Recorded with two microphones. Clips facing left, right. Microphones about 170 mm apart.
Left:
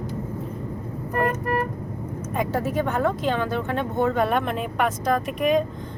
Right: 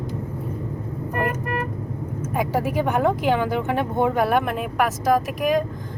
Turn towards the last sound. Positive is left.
turn(degrees=0)  # may be behind; listen again after turning